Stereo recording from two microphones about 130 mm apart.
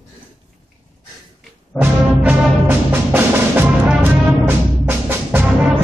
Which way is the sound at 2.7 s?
15° right (ahead or behind).